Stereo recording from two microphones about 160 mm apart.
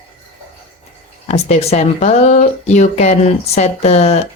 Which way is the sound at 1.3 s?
45° left (ahead or behind).